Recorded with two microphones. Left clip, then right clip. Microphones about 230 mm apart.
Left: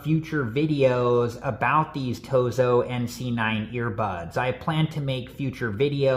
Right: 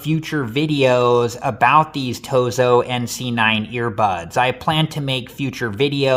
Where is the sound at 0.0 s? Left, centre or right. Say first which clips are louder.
Right 4 dB; right.